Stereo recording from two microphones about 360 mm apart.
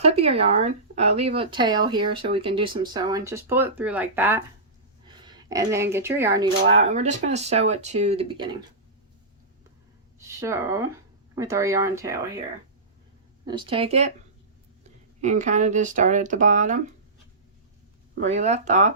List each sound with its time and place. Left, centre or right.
0.0 s speech: centre
10.2 s speech: centre
13.4 s speech: centre
15.2 s speech: centre
18.1 s speech: centre